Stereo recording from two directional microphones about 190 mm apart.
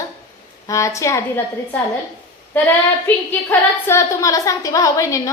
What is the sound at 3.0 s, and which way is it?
A woman's voice, 10° left (ahead or behind).